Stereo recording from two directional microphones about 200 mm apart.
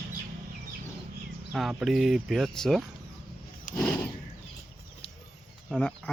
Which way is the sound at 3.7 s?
45° left (ahead or behind).